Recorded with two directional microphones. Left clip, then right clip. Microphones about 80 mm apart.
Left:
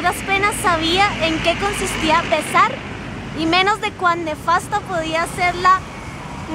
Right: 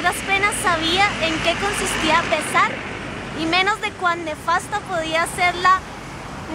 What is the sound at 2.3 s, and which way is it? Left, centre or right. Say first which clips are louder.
Speech: left 3 dB; centre.